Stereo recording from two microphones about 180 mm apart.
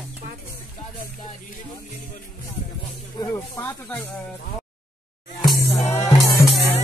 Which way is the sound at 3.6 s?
10° left (ahead or behind).